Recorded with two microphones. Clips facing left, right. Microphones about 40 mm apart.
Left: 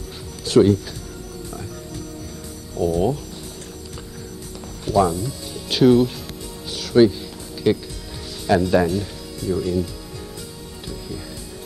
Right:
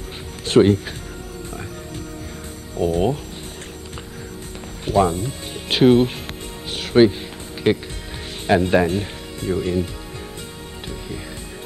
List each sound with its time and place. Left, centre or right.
0.5 s speech: right
2.8 s speech: right
4.8 s speech: right
6.7 s music: right
7.7 s speech: right